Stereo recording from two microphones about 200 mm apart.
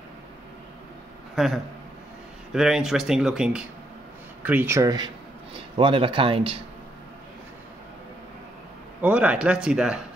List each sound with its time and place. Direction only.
1.3 s a man's voice: centre (ahead or behind); by 6.6 s 25° right (ahead or behind)
9.0 s speech: 5° right (ahead or behind)